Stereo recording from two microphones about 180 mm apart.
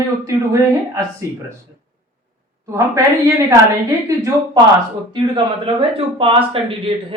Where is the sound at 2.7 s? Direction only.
15° right (ahead or behind).